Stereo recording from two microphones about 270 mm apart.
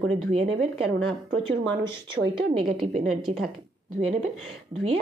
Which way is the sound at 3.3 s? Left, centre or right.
Right.